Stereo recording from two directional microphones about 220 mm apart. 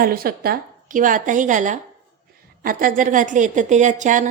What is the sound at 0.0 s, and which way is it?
A woman's voice, 40° right (ahead or behind).